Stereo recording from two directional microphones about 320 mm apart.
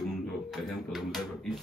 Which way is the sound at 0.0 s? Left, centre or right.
Centre.